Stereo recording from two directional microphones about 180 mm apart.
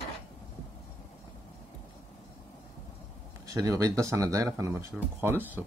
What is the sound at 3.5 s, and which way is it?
Speech, 20° right (ahead or behind).